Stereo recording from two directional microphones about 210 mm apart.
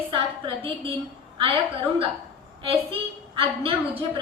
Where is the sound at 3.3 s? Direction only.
25° right (ahead or behind).